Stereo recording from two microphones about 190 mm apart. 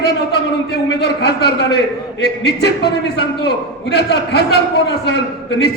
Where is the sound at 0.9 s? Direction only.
60° left (ahead or behind).